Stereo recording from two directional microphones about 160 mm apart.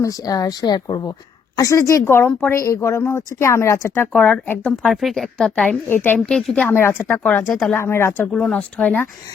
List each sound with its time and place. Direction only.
0.0 s speech: 20° left (ahead or behind)
6.1 s speech: centre (ahead or behind)
7.8 s speech: 15° left (ahead or behind)
8.3 s speech: 5° left (ahead or behind)